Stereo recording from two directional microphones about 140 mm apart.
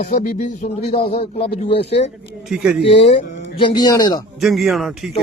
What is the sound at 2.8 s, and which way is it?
Speech, 40° left (ahead or behind).